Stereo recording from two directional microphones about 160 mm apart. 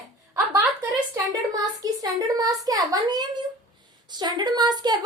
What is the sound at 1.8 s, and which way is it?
A child's voice, 25° right (ahead or behind).